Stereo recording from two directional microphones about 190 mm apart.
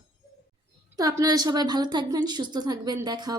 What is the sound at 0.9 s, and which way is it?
A woman's voice, 20° right (ahead or behind).